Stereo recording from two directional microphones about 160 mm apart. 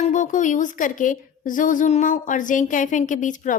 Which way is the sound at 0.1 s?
50° left (ahead or behind).